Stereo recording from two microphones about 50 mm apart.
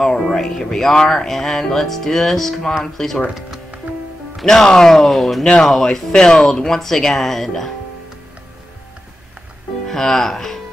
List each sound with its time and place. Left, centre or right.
0.0 s speech: centre
4.4 s speech: centre
9.8 s speech: centre